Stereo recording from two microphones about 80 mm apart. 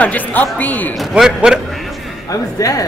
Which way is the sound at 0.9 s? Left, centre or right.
Centre.